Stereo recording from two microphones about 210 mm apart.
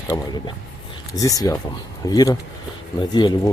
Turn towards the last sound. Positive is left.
turn(degrees=20)  # may be behind; listen again after turning